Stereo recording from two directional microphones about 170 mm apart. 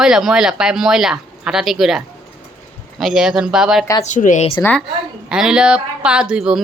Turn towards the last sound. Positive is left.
turn(degrees=-5)  # may be behind; listen again after turning